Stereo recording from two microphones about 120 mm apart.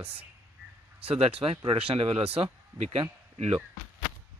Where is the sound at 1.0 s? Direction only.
55° right (ahead or behind).